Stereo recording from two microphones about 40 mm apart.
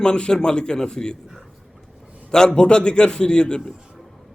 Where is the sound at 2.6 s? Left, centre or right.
Left.